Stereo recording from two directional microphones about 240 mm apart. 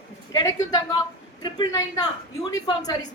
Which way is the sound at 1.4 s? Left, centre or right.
Centre.